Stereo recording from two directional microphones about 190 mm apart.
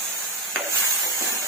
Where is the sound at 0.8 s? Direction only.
15° right (ahead or behind).